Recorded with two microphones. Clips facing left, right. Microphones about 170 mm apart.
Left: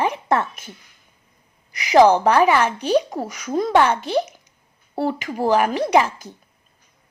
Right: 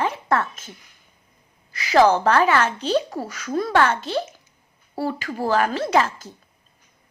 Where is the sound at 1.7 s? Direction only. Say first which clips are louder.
Left 3 dB; 15° left (ahead or behind).